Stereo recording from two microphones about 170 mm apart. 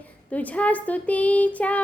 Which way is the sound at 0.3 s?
10° left (ahead or behind).